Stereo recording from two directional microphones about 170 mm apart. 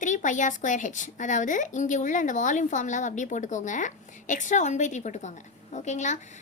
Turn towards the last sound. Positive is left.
turn(degrees=45)  # may be behind; listen again after turning